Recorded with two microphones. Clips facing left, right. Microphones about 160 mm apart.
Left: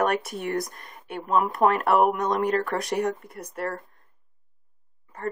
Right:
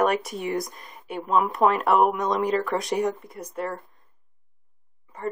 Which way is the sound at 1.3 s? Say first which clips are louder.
Even; 45° left (ahead or behind).